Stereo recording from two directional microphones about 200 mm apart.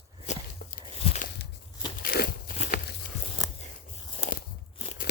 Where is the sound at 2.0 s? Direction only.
50° left (ahead or behind).